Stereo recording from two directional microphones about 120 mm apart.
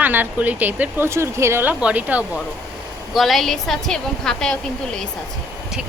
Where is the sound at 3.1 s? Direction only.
Centre (ahead or behind).